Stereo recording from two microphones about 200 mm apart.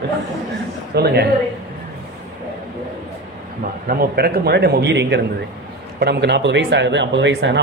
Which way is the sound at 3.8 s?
50° right (ahead or behind).